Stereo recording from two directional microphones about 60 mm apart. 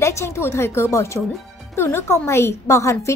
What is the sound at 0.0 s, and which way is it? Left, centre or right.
A woman's voice, left.